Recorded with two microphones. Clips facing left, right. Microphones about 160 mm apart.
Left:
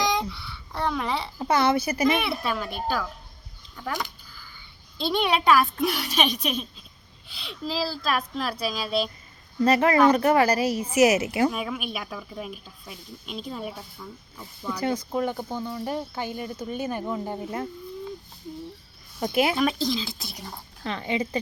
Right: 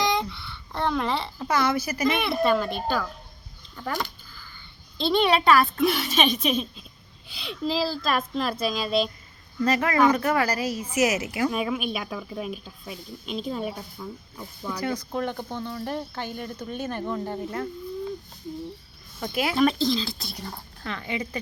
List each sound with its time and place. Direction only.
0.0 s babbling: 5° left (ahead or behind)
1.4 s speech: 25° left (ahead or behind)
2.0 s speech: 5° left (ahead or behind)
9.6 s speech: 30° left (ahead or behind)
11.5 s speech: centre (ahead or behind)
15.1 s speech: 10° left (ahead or behind)
19.3 s speech: 20° left (ahead or behind)
20.8 s speech: 25° left (ahead or behind)